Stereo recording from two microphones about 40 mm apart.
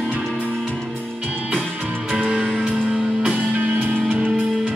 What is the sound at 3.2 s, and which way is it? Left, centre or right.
Music, right.